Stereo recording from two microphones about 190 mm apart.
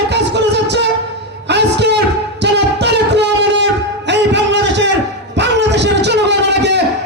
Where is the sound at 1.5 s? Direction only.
65° right (ahead or behind).